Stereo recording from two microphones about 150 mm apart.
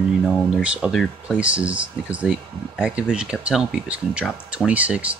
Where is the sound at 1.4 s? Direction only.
10° right (ahead or behind).